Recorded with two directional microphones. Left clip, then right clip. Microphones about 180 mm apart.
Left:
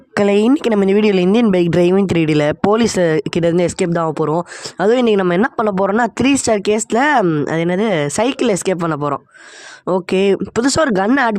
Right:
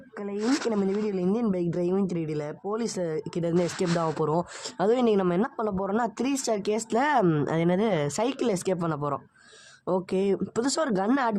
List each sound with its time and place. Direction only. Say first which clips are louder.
0.1 s speech: left 16 dB; 60° left (ahead or behind); by 11.3 s 45° left (ahead or behind)